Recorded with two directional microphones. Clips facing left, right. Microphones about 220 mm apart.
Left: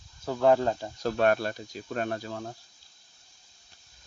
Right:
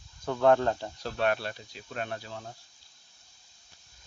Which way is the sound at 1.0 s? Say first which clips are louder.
Left 5 dB; 45° left (ahead or behind).